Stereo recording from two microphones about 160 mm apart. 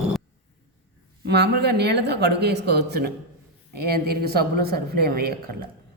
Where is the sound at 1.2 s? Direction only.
90° right; by 5.7 s 70° right (ahead or behind).